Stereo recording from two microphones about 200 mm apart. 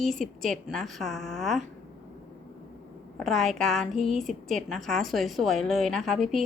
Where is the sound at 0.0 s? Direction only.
Centre (ahead or behind).